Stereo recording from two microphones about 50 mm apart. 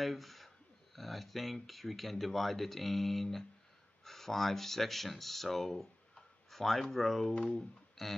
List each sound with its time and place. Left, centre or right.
0.0 s speech: centre
7.3 s speech: left
8.0 s a sound: centre